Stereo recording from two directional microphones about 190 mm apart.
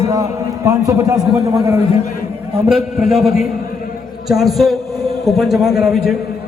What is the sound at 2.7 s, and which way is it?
A man's voice, centre (ahead or behind).